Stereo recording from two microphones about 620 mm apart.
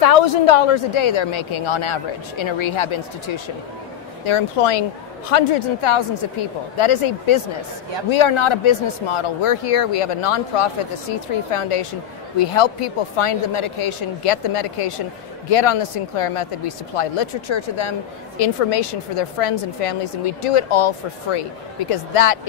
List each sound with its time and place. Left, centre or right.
0.0 s speech: left
4.2 s a woman's voice: left